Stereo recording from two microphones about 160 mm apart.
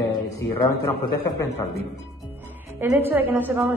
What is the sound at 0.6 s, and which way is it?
Speech, 20° left (ahead or behind).